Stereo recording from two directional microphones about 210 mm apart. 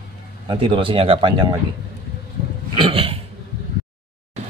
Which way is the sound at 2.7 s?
25° right (ahead or behind).